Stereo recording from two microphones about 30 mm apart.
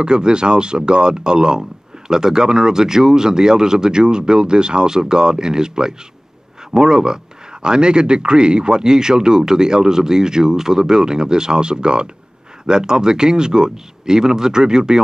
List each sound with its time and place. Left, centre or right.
0.0 s speech: right